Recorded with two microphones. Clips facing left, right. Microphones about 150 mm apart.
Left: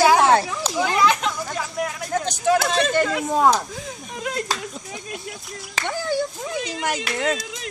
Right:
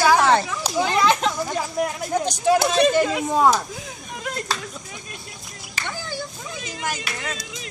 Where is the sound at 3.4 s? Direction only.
Centre (ahead or behind).